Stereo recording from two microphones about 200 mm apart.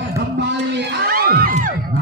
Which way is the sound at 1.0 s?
50° right (ahead or behind).